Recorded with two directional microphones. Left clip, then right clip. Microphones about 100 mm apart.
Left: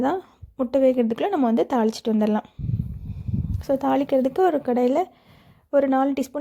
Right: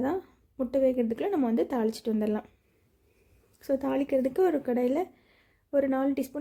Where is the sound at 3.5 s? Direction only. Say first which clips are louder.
Left 7 dB; 35° left (ahead or behind).